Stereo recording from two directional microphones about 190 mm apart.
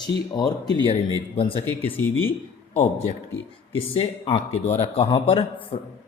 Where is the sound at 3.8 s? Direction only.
30° left (ahead or behind).